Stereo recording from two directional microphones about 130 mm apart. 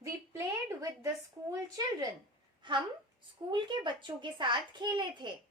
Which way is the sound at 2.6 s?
35° right (ahead or behind).